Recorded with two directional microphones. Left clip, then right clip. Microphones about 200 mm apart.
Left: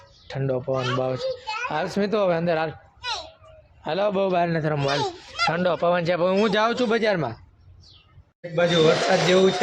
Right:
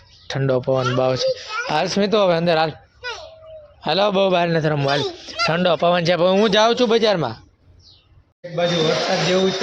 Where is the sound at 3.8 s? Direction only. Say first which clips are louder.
Right 6 dB; 30° right (ahead or behind).